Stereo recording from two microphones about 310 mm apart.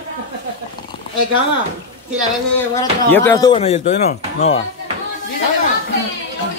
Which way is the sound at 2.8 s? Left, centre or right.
Centre.